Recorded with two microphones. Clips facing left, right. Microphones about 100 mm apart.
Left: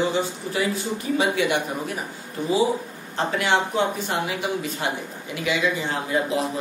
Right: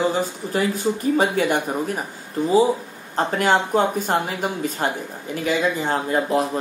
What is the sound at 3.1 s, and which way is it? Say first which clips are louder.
Speech: right 3 dB; 45° right (ahead or behind).